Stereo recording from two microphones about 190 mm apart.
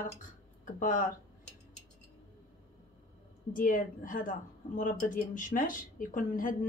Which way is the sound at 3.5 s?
45° left (ahead or behind).